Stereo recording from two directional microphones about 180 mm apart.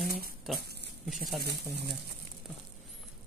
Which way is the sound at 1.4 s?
65° right (ahead or behind).